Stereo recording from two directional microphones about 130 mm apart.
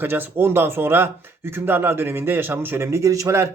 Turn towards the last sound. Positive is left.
turn(degrees=-25)  # may be behind; listen again after turning